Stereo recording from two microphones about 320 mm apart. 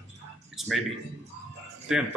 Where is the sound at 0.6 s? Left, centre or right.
Centre.